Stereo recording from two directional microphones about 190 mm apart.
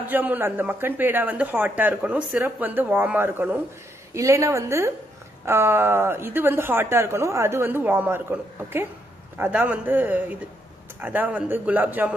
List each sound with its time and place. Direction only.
0.0 s speech: 10° right (ahead or behind)